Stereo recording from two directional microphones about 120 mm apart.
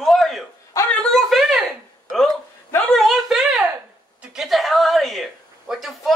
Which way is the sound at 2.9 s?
Centre (ahead or behind).